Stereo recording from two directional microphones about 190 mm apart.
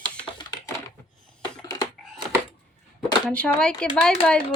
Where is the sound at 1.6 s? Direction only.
20° left (ahead or behind).